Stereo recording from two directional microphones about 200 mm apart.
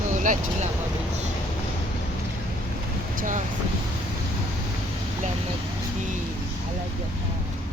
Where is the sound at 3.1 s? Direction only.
40° right (ahead or behind).